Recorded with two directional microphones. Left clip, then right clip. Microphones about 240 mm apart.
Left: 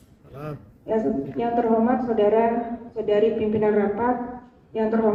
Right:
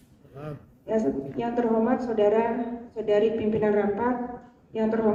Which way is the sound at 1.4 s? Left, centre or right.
Right.